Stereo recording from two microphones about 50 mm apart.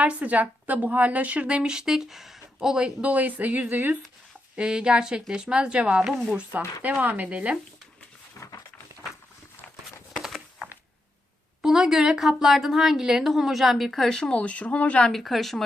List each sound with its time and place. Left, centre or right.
0.0 s a woman's voice: right
4.5 s a woman's voice: centre
6.5 s a woman's voice: right
8.4 s a sound: left
11.6 s a woman's voice: centre
14.1 s speech: centre
15.1 s speech: centre